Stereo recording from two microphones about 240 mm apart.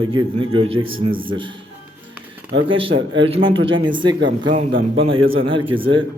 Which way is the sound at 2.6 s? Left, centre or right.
Right.